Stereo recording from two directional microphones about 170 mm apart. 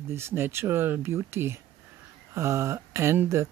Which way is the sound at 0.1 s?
15° right (ahead or behind).